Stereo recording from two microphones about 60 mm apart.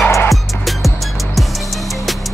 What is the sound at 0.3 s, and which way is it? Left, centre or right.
Music, centre.